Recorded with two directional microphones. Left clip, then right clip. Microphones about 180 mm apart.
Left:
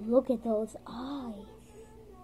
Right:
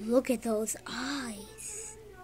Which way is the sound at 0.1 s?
65° right (ahead or behind).